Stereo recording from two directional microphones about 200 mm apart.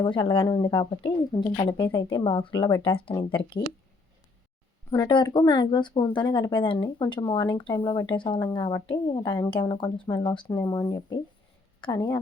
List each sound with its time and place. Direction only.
0.0 s speech: 25° left (ahead or behind)
3.6 s speech: 40° left (ahead or behind)
4.9 s speech: 20° left (ahead or behind)